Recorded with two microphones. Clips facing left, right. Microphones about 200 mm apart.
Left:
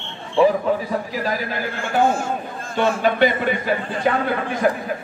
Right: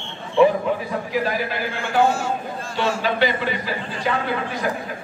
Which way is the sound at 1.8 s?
50° left (ahead or behind).